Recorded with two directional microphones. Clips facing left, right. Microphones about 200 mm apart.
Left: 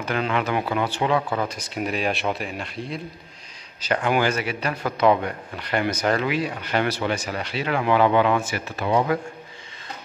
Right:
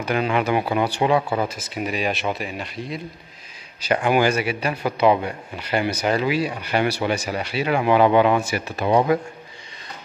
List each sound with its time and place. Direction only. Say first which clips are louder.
0.0 s speech: right 3 dB; 10° right (ahead or behind)
3.8 s speech: right 3 dB; 10° right (ahead or behind)